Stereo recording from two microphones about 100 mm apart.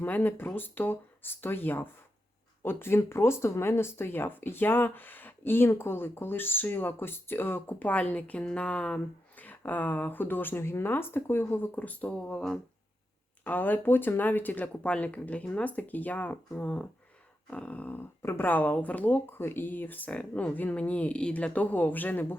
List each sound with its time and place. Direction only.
0.0 s speech: 20° left (ahead or behind)